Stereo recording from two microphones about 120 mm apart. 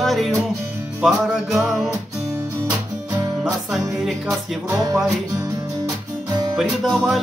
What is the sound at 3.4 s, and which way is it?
Speech, centre (ahead or behind).